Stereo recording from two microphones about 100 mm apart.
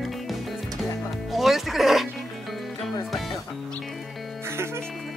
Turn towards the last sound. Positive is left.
turn(degrees=-25)  # may be behind; listen again after turning